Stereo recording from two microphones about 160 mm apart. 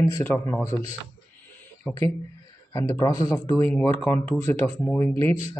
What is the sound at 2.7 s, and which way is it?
Speech, 20° left (ahead or behind).